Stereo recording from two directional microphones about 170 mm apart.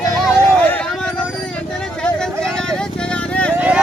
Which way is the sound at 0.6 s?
10° left (ahead or behind).